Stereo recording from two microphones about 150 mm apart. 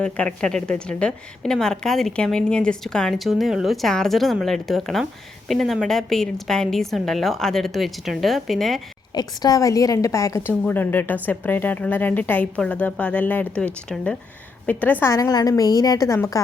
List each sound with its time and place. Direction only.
0.0 s a woman's voice: 5° left (ahead or behind)
9.1 s a woman's voice: 25° left (ahead or behind)